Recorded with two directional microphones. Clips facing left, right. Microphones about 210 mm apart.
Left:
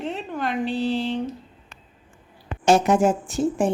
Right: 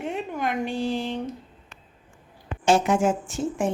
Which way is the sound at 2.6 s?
40° left (ahead or behind).